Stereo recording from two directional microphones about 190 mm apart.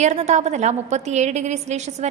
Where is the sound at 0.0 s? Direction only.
35° right (ahead or behind).